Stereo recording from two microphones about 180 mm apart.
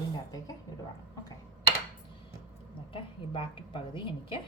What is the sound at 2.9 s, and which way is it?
A woman's voice, 30° left (ahead or behind).